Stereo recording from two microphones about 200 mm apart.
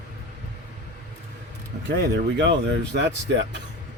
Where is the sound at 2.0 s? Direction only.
60° right (ahead or behind).